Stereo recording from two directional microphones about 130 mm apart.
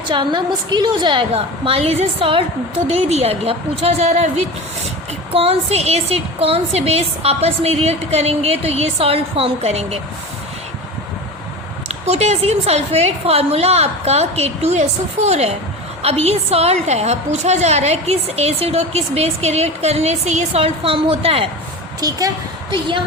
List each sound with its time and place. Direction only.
0.1 s a woman's voice: 35° right (ahead or behind)
1.3 s a woman's voice: 45° right (ahead or behind)
5.3 s a woman's voice: 50° right (ahead or behind)
12.0 s a woman's voice: 55° right (ahead or behind)
22.0 s a woman's voice: 30° right (ahead or behind)